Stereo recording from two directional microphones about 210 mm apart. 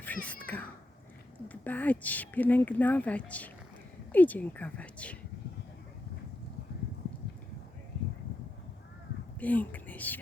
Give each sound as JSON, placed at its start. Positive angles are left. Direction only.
{"t": 0.0, "sound": "a sound", "side_deg": 5}
{"t": 1.5, "sound": "speech", "side_deg": 10}
{"t": 9.4, "sound": "whispering", "side_deg": 5}